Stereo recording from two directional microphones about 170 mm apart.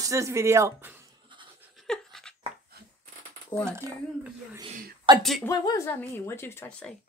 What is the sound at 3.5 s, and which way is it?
Speech, 30° left (ahead or behind).